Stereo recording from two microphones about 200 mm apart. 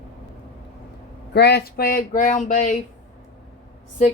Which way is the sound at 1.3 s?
55° left (ahead or behind).